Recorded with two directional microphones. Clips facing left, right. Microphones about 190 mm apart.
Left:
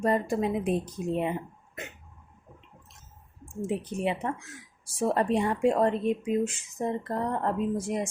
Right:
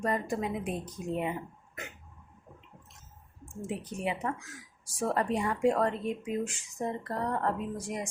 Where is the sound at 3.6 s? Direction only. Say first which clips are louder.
Left 5 dB; 25° left (ahead or behind).